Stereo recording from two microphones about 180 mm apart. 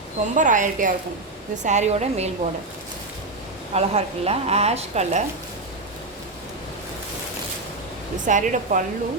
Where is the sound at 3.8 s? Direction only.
35° right (ahead or behind).